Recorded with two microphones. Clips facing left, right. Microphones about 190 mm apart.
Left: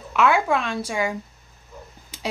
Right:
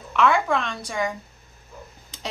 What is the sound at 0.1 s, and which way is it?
A woman's voice, 5° left (ahead or behind).